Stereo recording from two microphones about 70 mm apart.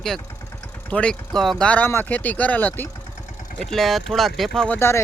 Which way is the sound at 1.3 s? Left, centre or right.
Centre.